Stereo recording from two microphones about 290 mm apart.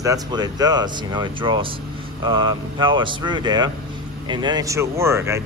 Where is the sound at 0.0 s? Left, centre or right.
Centre.